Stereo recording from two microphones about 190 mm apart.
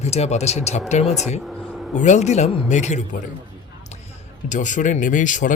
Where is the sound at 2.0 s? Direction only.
40° left (ahead or behind).